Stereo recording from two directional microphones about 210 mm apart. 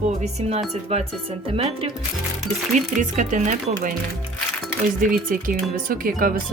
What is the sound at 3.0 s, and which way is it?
Speech, 35° right (ahead or behind).